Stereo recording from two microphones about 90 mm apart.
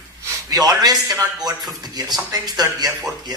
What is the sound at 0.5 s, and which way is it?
Speech, 45° right (ahead or behind).